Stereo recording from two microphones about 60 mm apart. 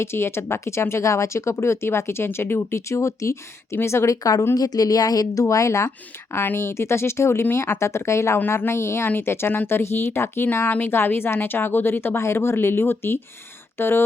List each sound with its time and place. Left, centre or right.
0.0 s speech: left
2.7 s a woman's voice: left
6.3 s speech: left